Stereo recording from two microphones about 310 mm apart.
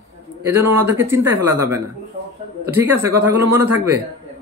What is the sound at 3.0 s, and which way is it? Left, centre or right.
Speech, centre.